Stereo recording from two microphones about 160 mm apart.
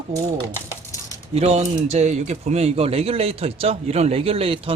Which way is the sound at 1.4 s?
40° right (ahead or behind).